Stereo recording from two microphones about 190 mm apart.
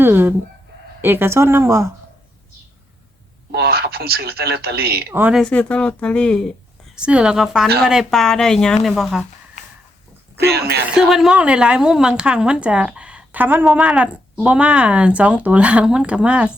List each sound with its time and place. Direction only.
0.0 s chicken: 10° right (ahead or behind)
1.0 s speech: 10° right (ahead or behind)
3.5 s speech: 55° right (ahead or behind)
5.1 s speech: 10° right (ahead or behind)
5.4 s a woman's voice: 5° left (ahead or behind)
10.4 s speech: 60° right (ahead or behind)
10.9 s a woman's voice: 5° right (ahead or behind)